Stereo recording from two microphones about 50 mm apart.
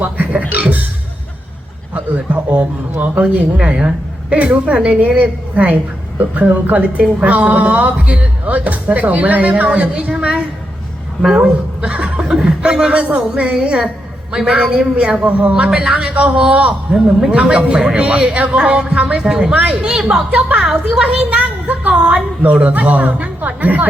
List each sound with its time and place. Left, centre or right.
0.0 s music: right
1.9 s a sound: right
3.0 s a woman's voice: right
15.8 s a woman's voice: centre; by 23.8 s right